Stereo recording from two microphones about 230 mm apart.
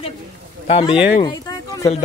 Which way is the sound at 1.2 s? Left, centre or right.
Centre.